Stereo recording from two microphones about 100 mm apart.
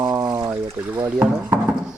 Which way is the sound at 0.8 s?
30° right (ahead or behind).